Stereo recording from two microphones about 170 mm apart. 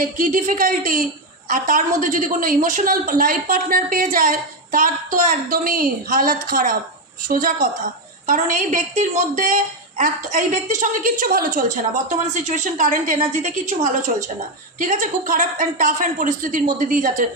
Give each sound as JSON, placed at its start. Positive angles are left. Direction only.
{"t": 0.0, "sound": "a woman's voice", "side_deg": -50}